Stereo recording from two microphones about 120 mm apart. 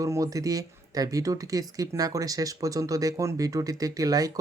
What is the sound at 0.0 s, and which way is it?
Speech, 30° right (ahead or behind).